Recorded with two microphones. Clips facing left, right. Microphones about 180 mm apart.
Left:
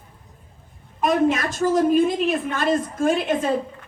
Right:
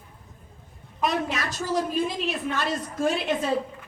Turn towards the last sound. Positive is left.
turn(degrees=50)  # may be behind; listen again after turning